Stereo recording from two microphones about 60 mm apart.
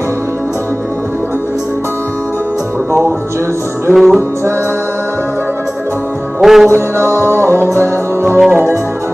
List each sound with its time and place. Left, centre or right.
3.9 s music: centre
6.4 s music: centre
7.2 s music: right
8.5 s music: right